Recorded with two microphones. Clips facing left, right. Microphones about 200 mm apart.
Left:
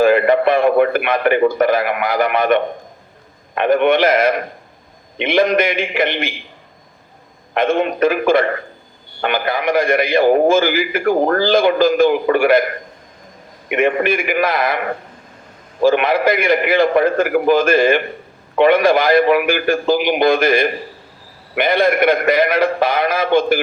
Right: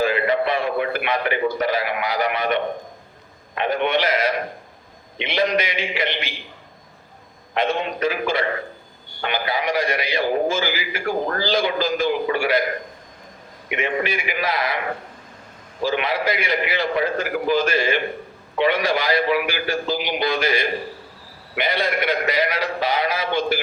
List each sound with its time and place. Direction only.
0.0 s a man's voice: 55° left (ahead or behind)
7.5 s a man's voice: 50° left (ahead or behind)
13.7 s a man's voice: 50° left (ahead or behind)